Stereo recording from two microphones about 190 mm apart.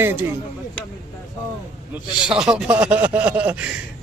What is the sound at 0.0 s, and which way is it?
Speech, 10° right (ahead or behind).